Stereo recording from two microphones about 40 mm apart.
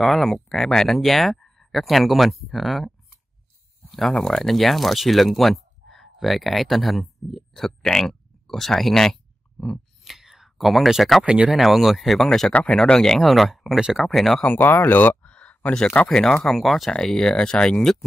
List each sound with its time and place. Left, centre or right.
0.0 s speech: centre
0.9 s speech: centre
3.9 s speech: centre
10.0 s whispering: centre
11.2 s speech: right
11.6 s speech: centre
12.3 s speech: centre
14.6 s speech: left
15.2 s a sound: left
16.1 s speech: centre
16.9 s speech: centre